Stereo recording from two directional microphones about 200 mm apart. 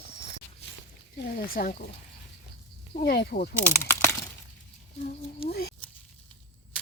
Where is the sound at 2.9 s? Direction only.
55° left (ahead or behind).